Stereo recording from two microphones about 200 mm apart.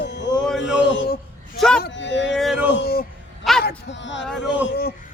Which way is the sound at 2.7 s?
50° left (ahead or behind).